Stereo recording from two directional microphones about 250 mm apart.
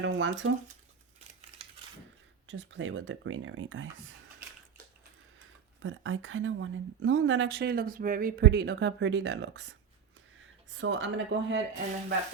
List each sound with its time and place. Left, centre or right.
0.0 s speech: right
2.5 s a woman's voice: right
5.8 s a woman's voice: right
10.8 s a woman's voice: right